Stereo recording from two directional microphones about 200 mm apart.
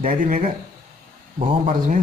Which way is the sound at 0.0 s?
40° right (ahead or behind).